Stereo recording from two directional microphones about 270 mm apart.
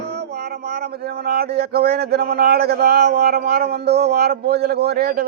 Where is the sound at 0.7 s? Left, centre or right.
Right.